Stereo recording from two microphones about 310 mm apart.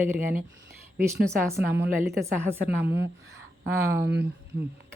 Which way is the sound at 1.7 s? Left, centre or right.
Centre.